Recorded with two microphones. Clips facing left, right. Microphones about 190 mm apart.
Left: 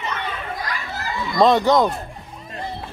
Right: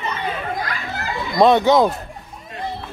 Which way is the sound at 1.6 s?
5° right (ahead or behind).